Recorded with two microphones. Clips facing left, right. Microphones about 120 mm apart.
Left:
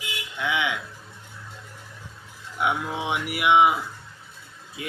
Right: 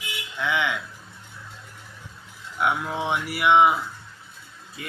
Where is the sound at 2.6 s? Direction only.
10° left (ahead or behind).